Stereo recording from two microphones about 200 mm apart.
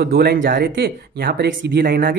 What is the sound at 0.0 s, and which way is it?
Speech, 50° right (ahead or behind).